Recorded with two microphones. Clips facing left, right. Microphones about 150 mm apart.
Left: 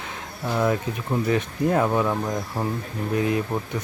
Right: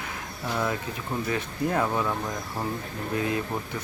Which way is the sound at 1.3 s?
20° left (ahead or behind).